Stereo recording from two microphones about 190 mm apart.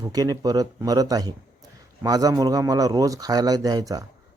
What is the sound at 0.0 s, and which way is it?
A man's voice, 20° right (ahead or behind).